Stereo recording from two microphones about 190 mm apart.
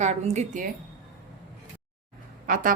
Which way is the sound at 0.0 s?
35° right (ahead or behind).